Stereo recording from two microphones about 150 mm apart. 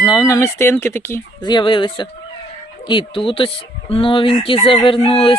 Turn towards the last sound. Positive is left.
turn(degrees=40)  # may be behind; listen again after turning